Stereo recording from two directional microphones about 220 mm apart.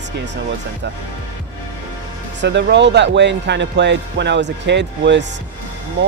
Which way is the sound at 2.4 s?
50° right (ahead or behind).